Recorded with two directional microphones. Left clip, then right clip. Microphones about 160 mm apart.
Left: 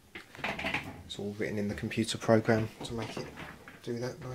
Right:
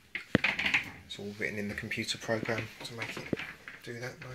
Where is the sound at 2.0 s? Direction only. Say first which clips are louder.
Left 7 dB; 30° left (ahead or behind).